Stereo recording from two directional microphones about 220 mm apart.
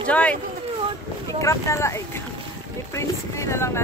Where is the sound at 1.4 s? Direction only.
15° left (ahead or behind).